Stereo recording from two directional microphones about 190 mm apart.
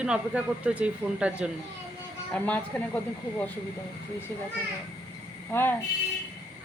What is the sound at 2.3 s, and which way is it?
Speech, 10° left (ahead or behind).